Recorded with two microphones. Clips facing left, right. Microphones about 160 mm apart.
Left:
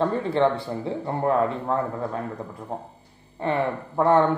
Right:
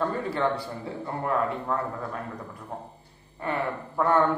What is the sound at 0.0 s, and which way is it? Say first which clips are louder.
A man's voice: left 5 dB; 25° left (ahead or behind).